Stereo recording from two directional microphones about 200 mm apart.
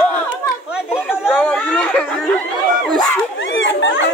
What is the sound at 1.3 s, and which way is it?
Chatter, 5° left (ahead or behind).